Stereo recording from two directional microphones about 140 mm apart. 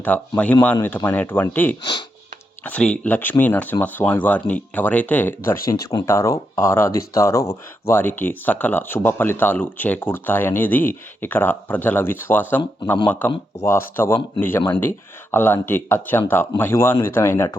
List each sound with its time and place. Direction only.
0.0 s speech: 10° left (ahead or behind)
1.8 s speech: 30° left (ahead or behind)
2.6 s speech: 10° left (ahead or behind)